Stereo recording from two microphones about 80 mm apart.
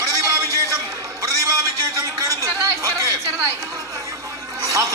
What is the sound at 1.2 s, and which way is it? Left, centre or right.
Music, right.